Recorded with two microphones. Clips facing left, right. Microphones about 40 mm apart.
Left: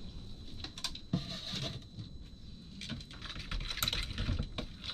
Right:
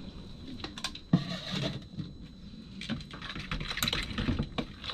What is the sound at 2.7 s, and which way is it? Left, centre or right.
Typing, right.